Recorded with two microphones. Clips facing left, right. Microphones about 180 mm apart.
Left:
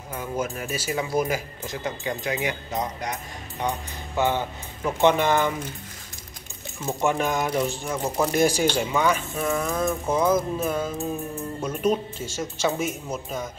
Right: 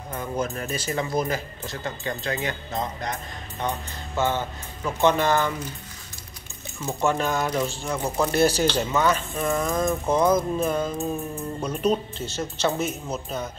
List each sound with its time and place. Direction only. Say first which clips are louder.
0.1 s speech: even; 10° left (ahead or behind)
6.9 s speech: even; 15° left (ahead or behind)